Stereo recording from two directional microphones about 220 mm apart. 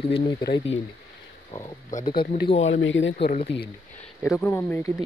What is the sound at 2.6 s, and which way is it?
Speech, 60° left (ahead or behind).